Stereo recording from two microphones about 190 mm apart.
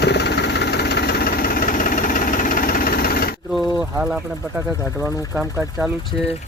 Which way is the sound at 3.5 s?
Centre (ahead or behind).